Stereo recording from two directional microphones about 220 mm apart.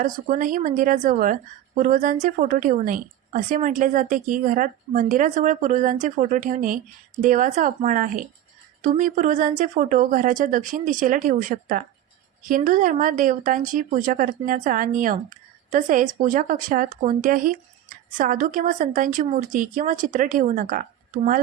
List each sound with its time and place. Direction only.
0.0 s a woman's voice: 35° right (ahead or behind)